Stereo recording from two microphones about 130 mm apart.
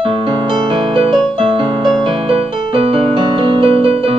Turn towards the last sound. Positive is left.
turn(degrees=-45)  # may be behind; listen again after turning